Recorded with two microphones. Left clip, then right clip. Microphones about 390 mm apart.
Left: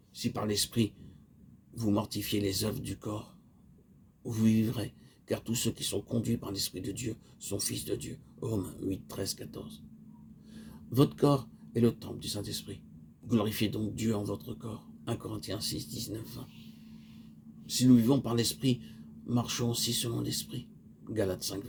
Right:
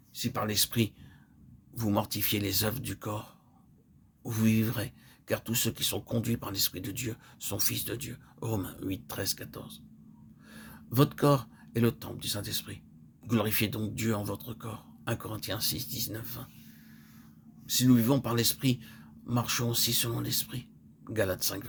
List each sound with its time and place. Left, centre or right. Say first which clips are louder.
0.1 s speech: right 1 dB; right
4.3 s speech: even; right
17.7 s speech: even; right